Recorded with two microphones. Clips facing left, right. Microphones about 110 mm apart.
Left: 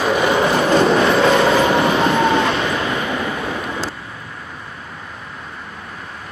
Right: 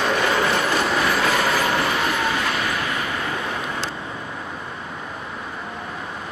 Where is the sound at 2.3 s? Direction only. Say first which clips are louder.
Left 7 dB; 25° left (ahead or behind).